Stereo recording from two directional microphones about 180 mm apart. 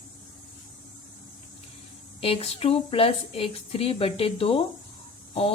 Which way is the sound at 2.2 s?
30° left (ahead or behind).